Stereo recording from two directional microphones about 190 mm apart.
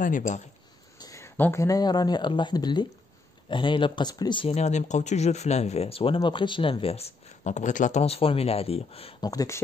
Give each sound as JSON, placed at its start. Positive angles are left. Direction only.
{"t": 0.0, "sound": "speech", "side_deg": 40}
{"t": 0.9, "sound": "speech", "side_deg": 15}
{"t": 9.2, "sound": "speech", "side_deg": 20}